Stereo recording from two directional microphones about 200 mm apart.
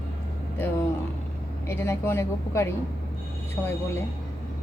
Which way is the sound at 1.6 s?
10° left (ahead or behind).